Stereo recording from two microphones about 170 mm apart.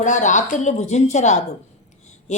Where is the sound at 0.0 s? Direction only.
45° left (ahead or behind).